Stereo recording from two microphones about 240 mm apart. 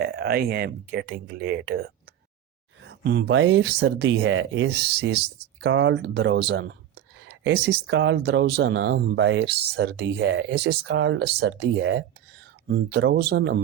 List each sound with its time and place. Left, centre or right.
0.0 s speech: right